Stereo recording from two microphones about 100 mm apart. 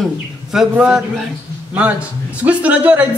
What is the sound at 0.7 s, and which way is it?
A man's voice, 10° right (ahead or behind).